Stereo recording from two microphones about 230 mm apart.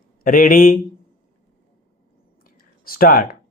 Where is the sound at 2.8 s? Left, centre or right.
Left.